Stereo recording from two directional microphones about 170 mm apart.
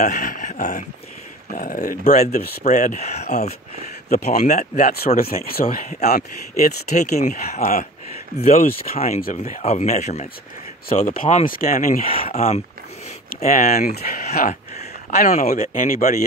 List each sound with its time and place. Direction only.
0.0 s speech: 50° left (ahead or behind)
2.6 s speech: 45° left (ahead or behind)
5.0 s speech: 60° left (ahead or behind)
12.1 s speech: 35° left (ahead or behind); by 14.6 s 55° left (ahead or behind)
14.8 s speech: 40° left (ahead or behind)